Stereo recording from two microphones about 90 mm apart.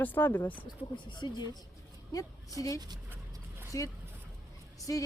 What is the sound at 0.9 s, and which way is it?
Speech, 60° left (ahead or behind).